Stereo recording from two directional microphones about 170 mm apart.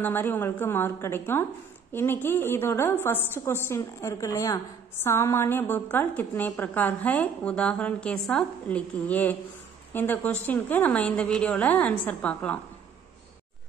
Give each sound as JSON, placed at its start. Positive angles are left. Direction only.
{"t": 0.0, "sound": "a woman's voice", "side_deg": 10}